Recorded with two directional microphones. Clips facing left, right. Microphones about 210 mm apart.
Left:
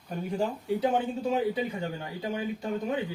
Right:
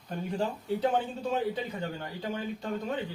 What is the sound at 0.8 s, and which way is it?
A man's voice, 10° left (ahead or behind).